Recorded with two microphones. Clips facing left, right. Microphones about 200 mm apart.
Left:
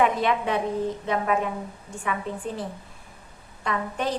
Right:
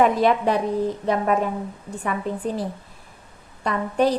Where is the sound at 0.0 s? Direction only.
40° right (ahead or behind).